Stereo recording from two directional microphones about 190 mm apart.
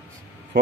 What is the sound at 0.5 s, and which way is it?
Speech, 50° right (ahead or behind).